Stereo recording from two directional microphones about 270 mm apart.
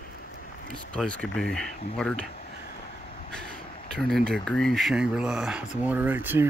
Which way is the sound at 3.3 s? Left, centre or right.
Centre.